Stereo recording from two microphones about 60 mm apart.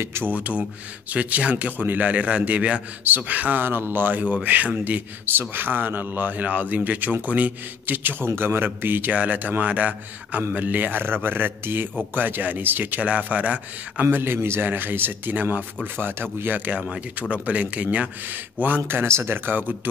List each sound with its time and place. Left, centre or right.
0.0 s speech: right
0.3 s a man's voice: right
14.1 s a man's voice: right
18.9 s a man's voice: right